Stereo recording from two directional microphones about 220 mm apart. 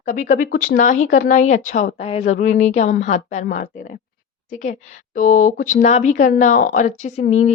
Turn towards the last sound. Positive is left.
turn(degrees=30)  # may be behind; listen again after turning